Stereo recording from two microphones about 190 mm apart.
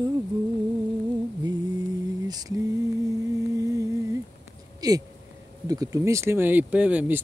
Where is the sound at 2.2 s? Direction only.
20° right (ahead or behind).